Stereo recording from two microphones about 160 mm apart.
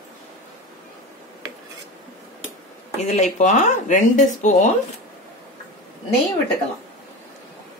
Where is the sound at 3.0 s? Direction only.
50° left (ahead or behind).